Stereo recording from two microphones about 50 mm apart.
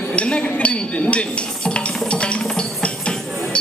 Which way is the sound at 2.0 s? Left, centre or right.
Left.